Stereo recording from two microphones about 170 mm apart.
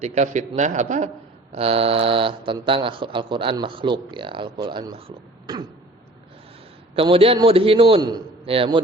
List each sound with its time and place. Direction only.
0.0 s a man's voice: 45° right (ahead or behind)
1.5 s speech: 35° right (ahead or behind)
6.9 s a man's voice: 35° right (ahead or behind)